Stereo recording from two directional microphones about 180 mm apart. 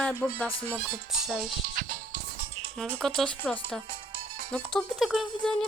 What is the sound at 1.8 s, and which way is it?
Music, 50° right (ahead or behind).